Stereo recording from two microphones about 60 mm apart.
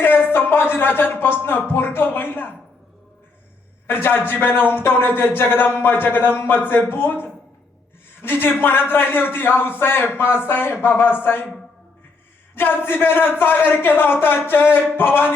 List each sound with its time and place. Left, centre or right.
0.0 s speech: left
1.7 s a sound: left
3.8 s speech: left
12.5 s speech: left